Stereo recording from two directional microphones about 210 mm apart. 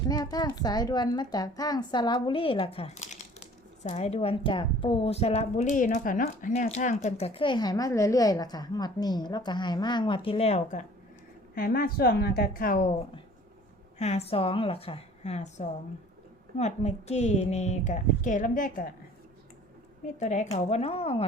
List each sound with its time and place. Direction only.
0.1 s a woman's voice: 20° left (ahead or behind)
11.5 s a woman's voice: 45° left (ahead or behind)
14.0 s a woman's voice: 30° left (ahead or behind)
20.1 s a woman's voice: 35° left (ahead or behind)